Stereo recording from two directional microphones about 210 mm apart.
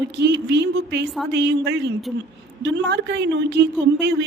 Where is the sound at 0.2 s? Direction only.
55° right (ahead or behind).